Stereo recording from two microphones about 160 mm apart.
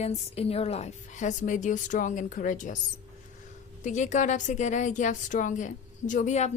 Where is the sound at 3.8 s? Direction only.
50° left (ahead or behind).